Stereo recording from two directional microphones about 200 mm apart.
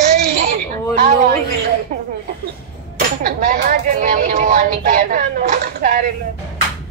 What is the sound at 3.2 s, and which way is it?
Speech, 45° right (ahead or behind).